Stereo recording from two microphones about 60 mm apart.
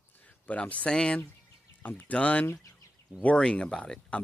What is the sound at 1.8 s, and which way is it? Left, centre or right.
Speech, left.